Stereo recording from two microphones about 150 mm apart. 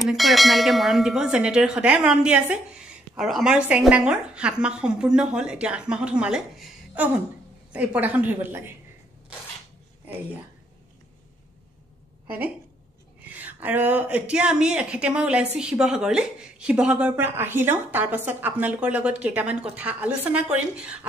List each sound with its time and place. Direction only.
0.0 s a woman's voice: centre (ahead or behind)
10.0 s speech: 10° right (ahead or behind)
13.3 s a woman's voice: 10° right (ahead or behind)